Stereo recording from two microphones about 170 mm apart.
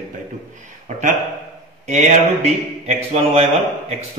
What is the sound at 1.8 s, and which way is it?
Speech, 45° right (ahead or behind).